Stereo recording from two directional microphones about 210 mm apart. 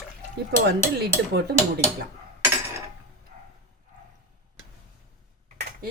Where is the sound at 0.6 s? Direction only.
50° right (ahead or behind).